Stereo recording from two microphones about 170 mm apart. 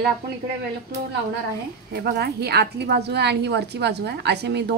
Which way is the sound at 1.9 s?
70° right (ahead or behind).